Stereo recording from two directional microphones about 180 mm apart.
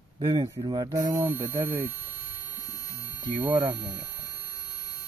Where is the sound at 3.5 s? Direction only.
20° right (ahead or behind).